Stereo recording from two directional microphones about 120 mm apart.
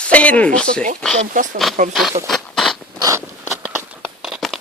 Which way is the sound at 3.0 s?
25° right (ahead or behind).